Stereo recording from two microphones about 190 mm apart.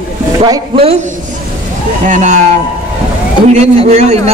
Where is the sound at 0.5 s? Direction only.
30° right (ahead or behind).